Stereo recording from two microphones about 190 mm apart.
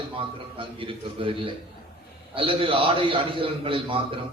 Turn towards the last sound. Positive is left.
turn(degrees=-25)  # may be behind; listen again after turning